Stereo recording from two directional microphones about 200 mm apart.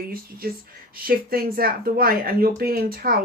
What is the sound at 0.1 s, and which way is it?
Speech, 50° right (ahead or behind).